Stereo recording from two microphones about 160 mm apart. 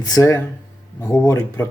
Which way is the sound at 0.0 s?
20° left (ahead or behind).